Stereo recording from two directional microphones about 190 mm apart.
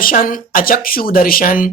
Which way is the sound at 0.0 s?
50° left (ahead or behind).